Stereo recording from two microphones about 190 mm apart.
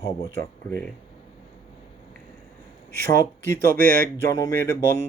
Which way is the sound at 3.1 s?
15° left (ahead or behind).